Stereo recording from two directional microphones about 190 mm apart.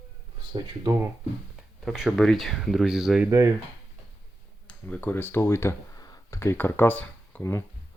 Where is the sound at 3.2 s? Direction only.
15° right (ahead or behind).